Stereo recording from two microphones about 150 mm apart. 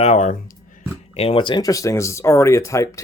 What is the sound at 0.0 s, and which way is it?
Speech, 50° left (ahead or behind).